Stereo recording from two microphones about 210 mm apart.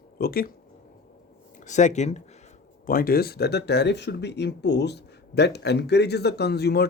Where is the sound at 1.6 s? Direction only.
35° left (ahead or behind).